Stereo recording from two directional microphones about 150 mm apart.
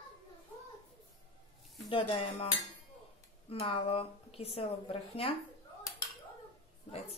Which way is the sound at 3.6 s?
40° left (ahead or behind).